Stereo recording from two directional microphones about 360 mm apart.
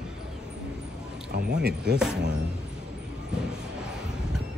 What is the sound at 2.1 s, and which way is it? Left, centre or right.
Speech, right.